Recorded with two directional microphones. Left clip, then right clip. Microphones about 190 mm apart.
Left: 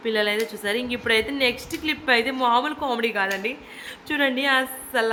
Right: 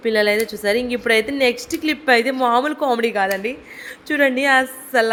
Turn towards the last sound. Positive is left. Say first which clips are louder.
# right 6 dB
turn(degrees=-20)  # may be behind; listen again after turning